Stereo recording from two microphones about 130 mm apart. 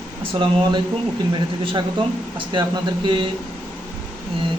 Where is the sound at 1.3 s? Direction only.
35° right (ahead or behind).